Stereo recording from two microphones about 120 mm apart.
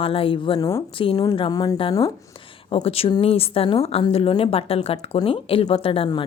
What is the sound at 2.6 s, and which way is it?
A woman's voice, 50° left (ahead or behind).